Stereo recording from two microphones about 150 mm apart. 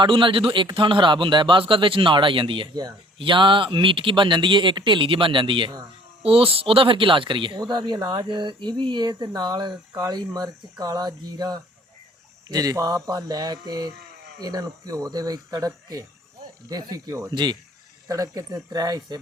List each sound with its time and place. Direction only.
0.0 s speech: 35° right (ahead or behind)